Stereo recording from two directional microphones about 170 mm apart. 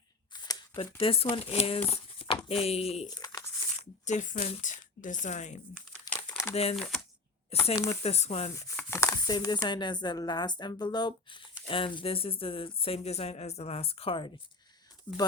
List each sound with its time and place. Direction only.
0.3 s shuffling cards: 25° left (ahead or behind)
0.9 s speech: 35° left (ahead or behind)
3.2 s crumpling: 25° left (ahead or behind)
3.8 s speech: 45° left (ahead or behind)
6.1 s crumpling: 5° left (ahead or behind)
6.5 s speech: 35° left (ahead or behind)
6.7 s speech: centre (ahead or behind)
7.5 s speech: 35° left (ahead or behind)
8.7 s speech: 10° left (ahead or behind); by 14.3 s 35° left (ahead or behind)
15.1 s speech: 10° left (ahead or behind)